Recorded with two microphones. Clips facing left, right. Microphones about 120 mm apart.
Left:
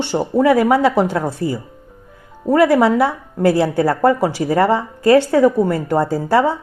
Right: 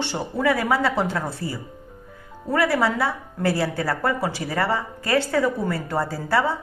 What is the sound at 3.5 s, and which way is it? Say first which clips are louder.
A woman's voice: left 8 dB; 45° left (ahead or behind).